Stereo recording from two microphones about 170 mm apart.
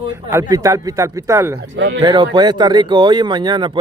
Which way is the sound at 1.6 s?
85° right.